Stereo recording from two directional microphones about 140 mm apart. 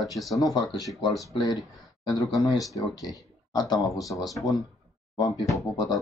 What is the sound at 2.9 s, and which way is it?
Speech, 30° left (ahead or behind).